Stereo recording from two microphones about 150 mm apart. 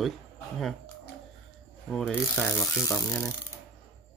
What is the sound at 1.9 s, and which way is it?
Speech, 5° left (ahead or behind).